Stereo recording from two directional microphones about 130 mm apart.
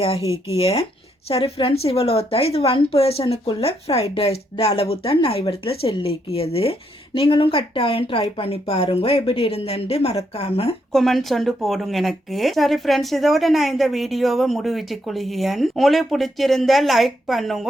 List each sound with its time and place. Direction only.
0.5 s speech: 50° left (ahead or behind)
10.9 s speech: centre (ahead or behind)